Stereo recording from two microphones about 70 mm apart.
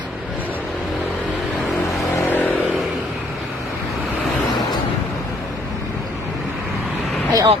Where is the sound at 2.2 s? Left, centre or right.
Left.